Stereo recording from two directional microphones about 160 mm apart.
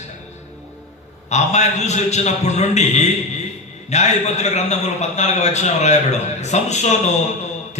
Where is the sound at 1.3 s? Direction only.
45° left (ahead or behind).